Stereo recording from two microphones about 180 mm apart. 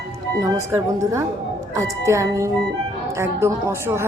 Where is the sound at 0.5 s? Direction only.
15° right (ahead or behind).